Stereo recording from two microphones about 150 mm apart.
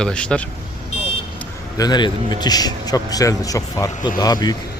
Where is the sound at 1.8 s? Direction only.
30° left (ahead or behind).